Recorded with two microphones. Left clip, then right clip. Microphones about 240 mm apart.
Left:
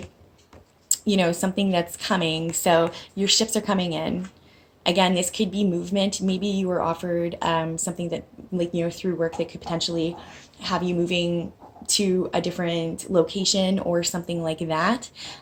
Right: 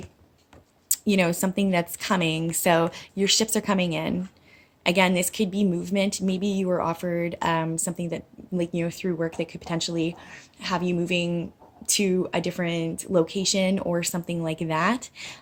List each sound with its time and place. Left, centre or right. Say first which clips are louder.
0.9 s speech: left 1 dB; right